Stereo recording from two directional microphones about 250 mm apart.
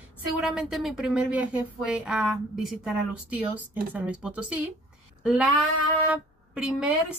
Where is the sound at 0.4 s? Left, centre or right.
Centre.